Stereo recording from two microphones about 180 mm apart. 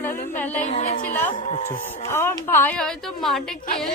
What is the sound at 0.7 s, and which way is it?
Speech, 40° left (ahead or behind).